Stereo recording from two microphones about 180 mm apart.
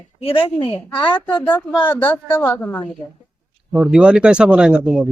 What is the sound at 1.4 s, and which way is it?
A woman's voice, 10° left (ahead or behind).